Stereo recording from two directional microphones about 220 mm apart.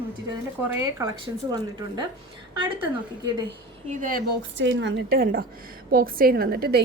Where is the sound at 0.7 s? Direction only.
15° right (ahead or behind).